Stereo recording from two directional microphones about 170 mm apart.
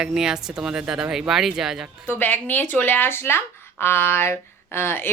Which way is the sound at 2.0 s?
10° left (ahead or behind).